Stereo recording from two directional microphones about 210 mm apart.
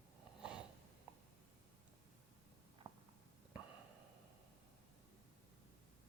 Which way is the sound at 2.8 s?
25° right (ahead or behind).